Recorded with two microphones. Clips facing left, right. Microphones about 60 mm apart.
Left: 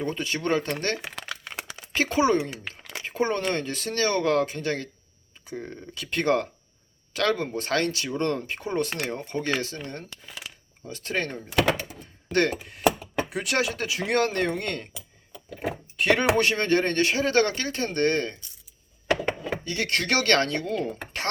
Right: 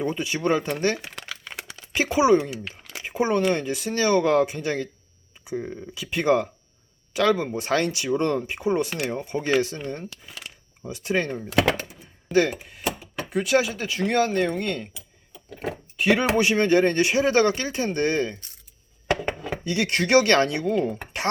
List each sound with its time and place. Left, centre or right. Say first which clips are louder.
0.0 s speech: right 3 dB; centre
16.0 s speech: right 1 dB; centre
19.6 s speech: right 4 dB; right